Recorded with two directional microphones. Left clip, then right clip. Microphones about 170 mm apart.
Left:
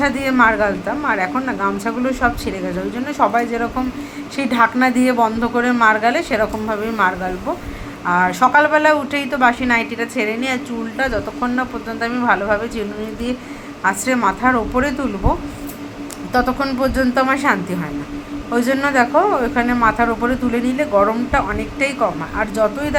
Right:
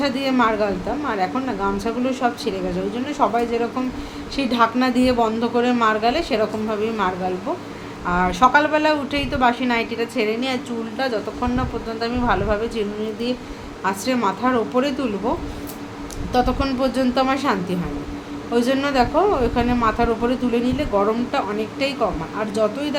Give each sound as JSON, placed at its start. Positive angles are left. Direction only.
{"t": 0.0, "sound": "a woman's voice", "side_deg": -5}
{"t": 13.8, "sound": "a woman's voice", "side_deg": 0}
{"t": 16.3, "sound": "a woman's voice", "side_deg": 0}